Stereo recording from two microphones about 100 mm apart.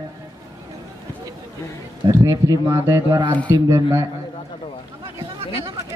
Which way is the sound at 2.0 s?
35° right (ahead or behind).